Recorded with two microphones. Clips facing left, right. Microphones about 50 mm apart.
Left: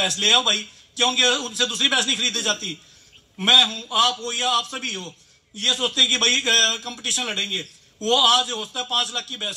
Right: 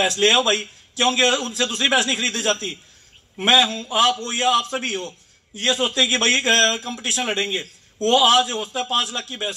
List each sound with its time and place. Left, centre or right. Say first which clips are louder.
0.0 s a man's voice: right 3 dB; right
8.8 s speech: even; right